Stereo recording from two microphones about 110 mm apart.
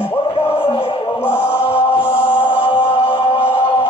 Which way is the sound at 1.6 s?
60° left (ahead or behind).